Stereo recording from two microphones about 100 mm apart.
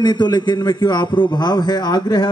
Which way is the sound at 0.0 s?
45° left (ahead or behind).